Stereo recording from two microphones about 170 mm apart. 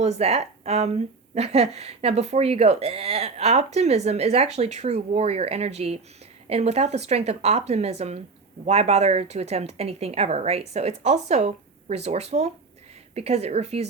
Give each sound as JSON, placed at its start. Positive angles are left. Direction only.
{"t": 0.0, "sound": "a woman's voice", "side_deg": -40}